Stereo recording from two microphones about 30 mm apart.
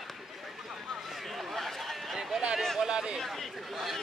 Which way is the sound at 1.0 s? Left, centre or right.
Centre.